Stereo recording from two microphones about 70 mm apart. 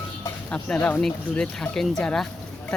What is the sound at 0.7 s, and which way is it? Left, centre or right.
Speech, left.